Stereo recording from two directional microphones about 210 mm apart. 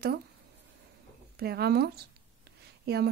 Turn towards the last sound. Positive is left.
turn(degrees=-50)  # may be behind; listen again after turning